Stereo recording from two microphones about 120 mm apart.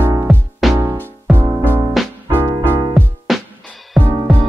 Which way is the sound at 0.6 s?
Centre (ahead or behind).